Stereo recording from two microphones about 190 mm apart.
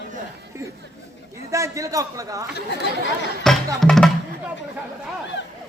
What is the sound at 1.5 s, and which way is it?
Speech, 15° right (ahead or behind).